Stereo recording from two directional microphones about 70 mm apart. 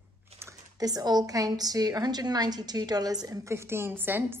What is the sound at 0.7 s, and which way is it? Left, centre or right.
A woman's voice, right.